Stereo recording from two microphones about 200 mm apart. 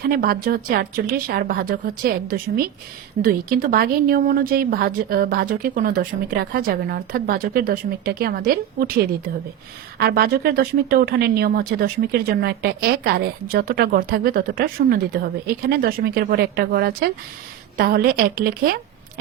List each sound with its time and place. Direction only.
0.1 s speech: 50° right (ahead or behind)
10.0 s a woman's voice: 50° right (ahead or behind)